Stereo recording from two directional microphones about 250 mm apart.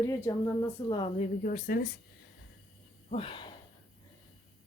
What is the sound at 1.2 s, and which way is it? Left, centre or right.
Speech, left.